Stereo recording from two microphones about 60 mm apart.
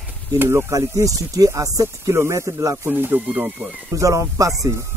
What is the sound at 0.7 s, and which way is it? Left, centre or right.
Speech, right.